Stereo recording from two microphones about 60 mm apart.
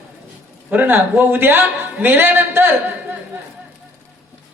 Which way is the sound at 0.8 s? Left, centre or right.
Right.